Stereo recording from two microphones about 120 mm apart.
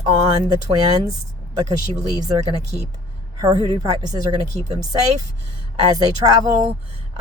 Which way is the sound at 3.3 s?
35° right (ahead or behind).